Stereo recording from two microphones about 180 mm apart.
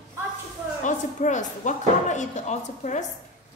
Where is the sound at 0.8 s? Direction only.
40° left (ahead or behind).